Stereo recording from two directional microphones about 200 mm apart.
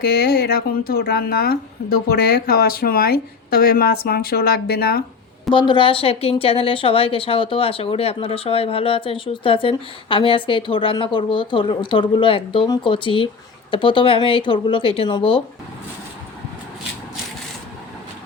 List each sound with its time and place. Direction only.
0.0 s speech: 50° left (ahead or behind)
5.5 s a woman's voice: 25° left (ahead or behind)